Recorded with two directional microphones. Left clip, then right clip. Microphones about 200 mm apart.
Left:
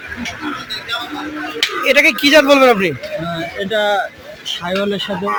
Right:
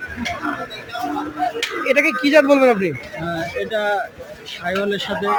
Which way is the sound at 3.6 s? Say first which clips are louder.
Left 5 dB; 30° left (ahead or behind).